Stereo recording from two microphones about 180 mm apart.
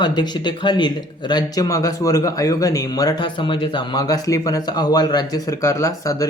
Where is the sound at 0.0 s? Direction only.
25° left (ahead or behind).